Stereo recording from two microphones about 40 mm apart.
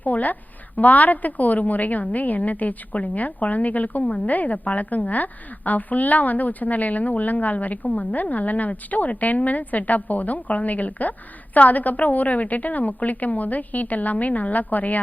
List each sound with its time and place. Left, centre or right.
0.0 s a woman's voice: left